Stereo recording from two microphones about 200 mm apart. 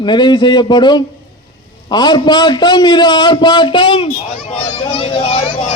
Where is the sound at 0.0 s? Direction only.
20° left (ahead or behind).